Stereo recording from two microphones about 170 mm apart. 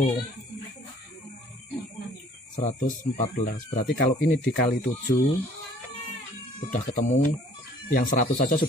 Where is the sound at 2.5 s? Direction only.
50° left (ahead or behind).